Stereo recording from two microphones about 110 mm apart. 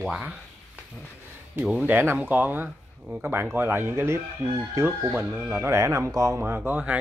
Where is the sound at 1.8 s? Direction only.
20° right (ahead or behind).